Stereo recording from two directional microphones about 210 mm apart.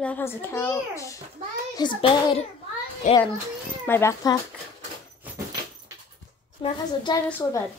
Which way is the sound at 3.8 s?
10° left (ahead or behind).